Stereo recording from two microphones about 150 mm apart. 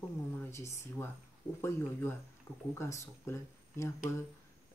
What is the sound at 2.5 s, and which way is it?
Speech, 20° left (ahead or behind).